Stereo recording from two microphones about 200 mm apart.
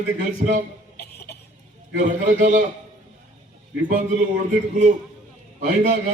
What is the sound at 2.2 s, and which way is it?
Speech, 40° right (ahead or behind).